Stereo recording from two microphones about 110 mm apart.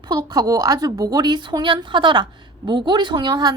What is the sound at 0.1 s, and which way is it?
A woman's voice, 40° right (ahead or behind).